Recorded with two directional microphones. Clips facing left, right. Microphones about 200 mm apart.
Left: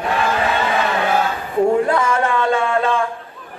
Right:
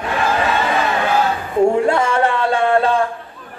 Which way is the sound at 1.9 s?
30° right (ahead or behind).